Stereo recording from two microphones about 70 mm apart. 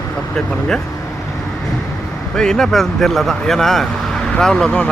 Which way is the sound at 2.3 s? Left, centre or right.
Centre.